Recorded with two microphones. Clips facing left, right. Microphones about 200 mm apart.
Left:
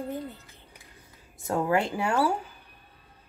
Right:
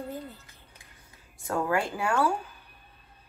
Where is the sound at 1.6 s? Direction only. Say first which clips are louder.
Left 2 dB; 20° left (ahead or behind).